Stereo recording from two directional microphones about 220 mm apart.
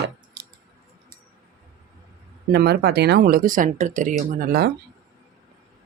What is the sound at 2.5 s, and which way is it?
Speech, 50° right (ahead or behind).